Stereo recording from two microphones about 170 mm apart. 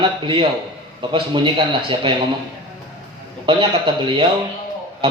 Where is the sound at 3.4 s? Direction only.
30° right (ahead or behind).